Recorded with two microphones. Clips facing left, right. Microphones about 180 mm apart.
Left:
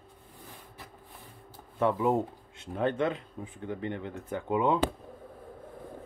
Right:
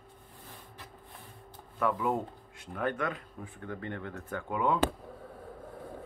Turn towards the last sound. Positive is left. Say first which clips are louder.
# left 3 dB
turn(degrees=20)  # may be behind; listen again after turning